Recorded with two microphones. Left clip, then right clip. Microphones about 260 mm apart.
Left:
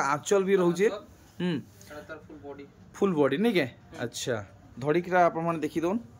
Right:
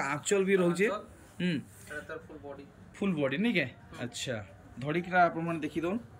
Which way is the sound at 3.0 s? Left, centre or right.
Centre.